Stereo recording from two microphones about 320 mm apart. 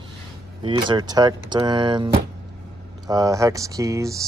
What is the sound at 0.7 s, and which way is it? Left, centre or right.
Speech, centre.